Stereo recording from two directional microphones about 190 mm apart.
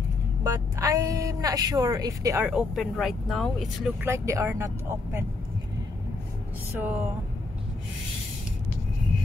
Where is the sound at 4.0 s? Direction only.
15° right (ahead or behind).